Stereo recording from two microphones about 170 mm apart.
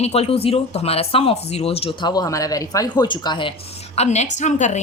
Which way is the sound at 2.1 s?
20° left (ahead or behind).